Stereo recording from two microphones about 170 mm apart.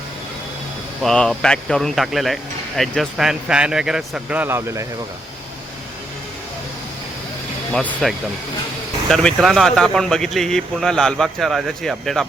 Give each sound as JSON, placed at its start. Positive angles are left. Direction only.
{"t": 1.0, "sound": "speech", "side_deg": 5}
{"t": 7.7, "sound": "speech", "side_deg": 5}